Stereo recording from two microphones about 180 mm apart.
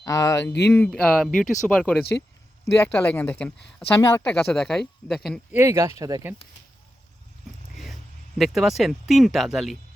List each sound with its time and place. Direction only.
0.0 s speech: 20° left (ahead or behind)
5.5 s speech: 15° right (ahead or behind)
8.4 s speech: centre (ahead or behind)